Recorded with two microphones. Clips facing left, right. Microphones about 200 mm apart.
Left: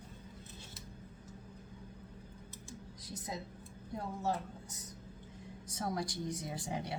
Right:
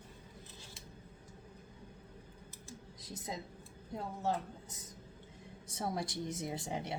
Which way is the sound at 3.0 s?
25° right (ahead or behind).